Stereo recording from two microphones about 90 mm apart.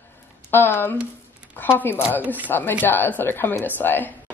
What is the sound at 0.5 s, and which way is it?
A woman's voice, 25° left (ahead or behind).